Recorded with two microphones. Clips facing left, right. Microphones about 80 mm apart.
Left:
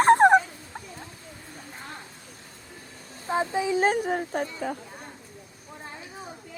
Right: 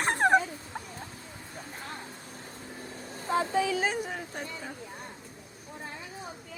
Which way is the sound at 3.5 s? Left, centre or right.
Left.